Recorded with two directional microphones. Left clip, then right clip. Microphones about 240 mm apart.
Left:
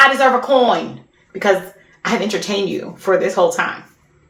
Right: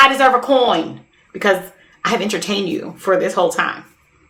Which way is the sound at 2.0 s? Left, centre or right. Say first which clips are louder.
Right 1 dB; right.